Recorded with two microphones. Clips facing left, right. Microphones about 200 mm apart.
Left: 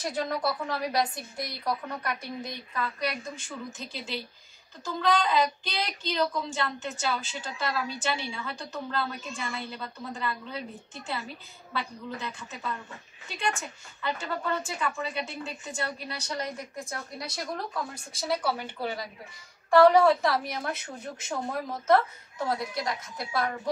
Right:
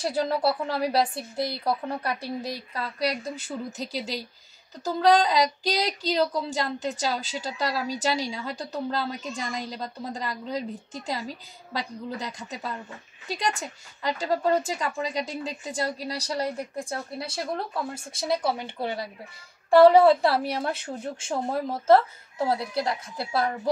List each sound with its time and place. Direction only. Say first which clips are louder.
0.0 s speech: right 5 dB; 30° right (ahead or behind)